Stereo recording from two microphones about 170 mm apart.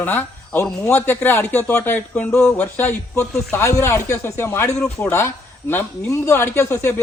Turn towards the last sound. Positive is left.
turn(degrees=15)  # may be behind; listen again after turning